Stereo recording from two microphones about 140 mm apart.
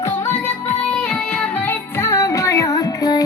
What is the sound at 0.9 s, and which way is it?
Music, 5° left (ahead or behind).